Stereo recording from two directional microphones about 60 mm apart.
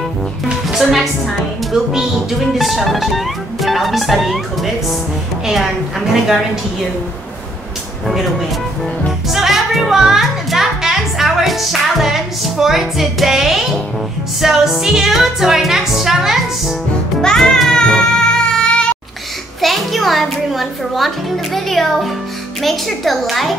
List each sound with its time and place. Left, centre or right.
0.5 s music: centre
9.3 s speech: centre
14.4 s music: centre
17.2 s music: centre
19.6 s music: centre